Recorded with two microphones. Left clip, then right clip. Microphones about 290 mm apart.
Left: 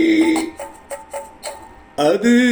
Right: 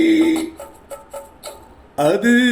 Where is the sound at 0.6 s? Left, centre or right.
Left.